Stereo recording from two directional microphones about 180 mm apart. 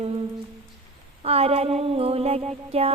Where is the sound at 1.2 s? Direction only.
35° right (ahead or behind).